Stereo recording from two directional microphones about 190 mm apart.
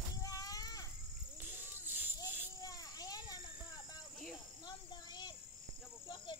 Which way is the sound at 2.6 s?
20° left (ahead or behind).